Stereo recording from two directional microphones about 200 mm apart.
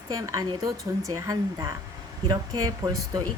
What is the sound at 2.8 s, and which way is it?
Speech, 20° right (ahead or behind).